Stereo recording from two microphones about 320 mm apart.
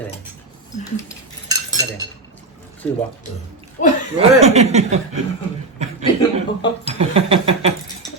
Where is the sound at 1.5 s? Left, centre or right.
Centre.